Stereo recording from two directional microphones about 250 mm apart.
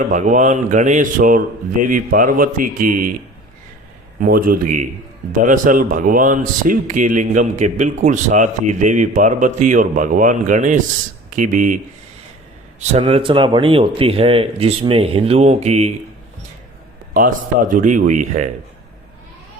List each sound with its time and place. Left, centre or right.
0.1 s speech: right
4.2 s speech: right
12.9 s speech: right
17.2 s speech: right